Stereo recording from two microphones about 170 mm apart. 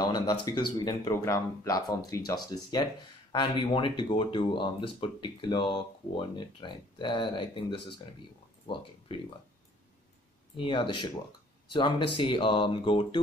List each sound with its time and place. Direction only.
0.0 s speech: 25° left (ahead or behind)
10.6 s speech: 30° left (ahead or behind)